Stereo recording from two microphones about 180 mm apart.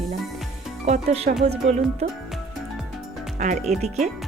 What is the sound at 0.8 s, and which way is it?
Speech, 40° right (ahead or behind).